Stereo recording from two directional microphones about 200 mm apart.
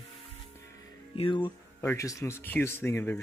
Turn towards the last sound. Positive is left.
turn(degrees=10)  # may be behind; listen again after turning